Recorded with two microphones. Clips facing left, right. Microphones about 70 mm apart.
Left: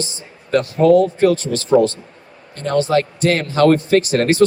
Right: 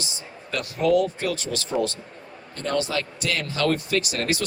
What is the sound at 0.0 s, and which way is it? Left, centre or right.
Speech, left.